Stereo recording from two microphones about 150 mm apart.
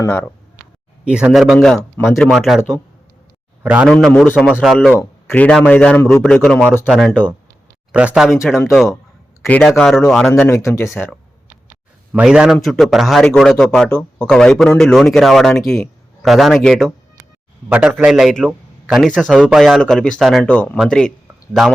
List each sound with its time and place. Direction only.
0.0 s speech: 15° left (ahead or behind)
1.0 s a man's voice: 5° right (ahead or behind)
3.8 s speech: centre (ahead or behind); by 6.2 s 20° left (ahead or behind)
6.2 s speech: 5° left (ahead or behind)
10.5 s speech: 20° left (ahead or behind)
12.1 s speech: 5° right (ahead or behind)
20.5 s speech: 10° left (ahead or behind)